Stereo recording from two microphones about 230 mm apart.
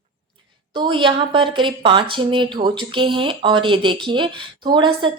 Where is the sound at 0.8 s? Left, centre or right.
Right.